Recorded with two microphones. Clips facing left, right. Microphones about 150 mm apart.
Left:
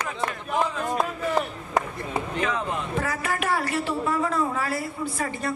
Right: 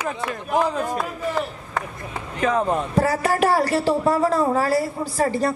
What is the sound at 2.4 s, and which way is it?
Speech, 40° right (ahead or behind).